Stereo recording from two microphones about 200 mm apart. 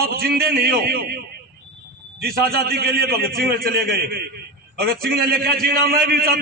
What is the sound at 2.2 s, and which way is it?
A man's voice, 50° right (ahead or behind).